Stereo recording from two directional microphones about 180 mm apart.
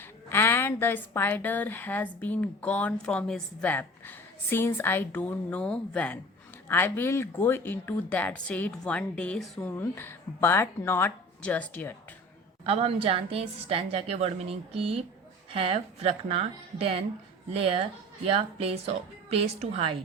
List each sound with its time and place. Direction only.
0.0 s a woman's voice: 10° left (ahead or behind)
12.6 s a woman's voice: 30° right (ahead or behind)